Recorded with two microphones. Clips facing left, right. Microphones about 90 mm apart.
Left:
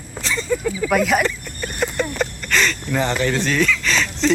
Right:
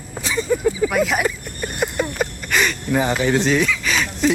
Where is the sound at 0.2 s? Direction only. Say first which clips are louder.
Right 2 dB; 15° right (ahead or behind).